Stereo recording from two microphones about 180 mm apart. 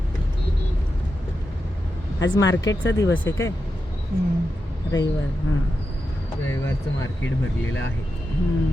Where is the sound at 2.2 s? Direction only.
90° left.